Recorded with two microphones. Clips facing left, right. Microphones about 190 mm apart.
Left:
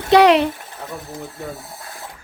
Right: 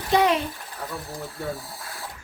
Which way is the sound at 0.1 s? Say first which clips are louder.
Left 8 dB; 75° left (ahead or behind).